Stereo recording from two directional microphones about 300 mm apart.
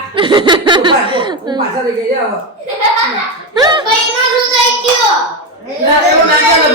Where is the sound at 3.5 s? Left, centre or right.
Centre.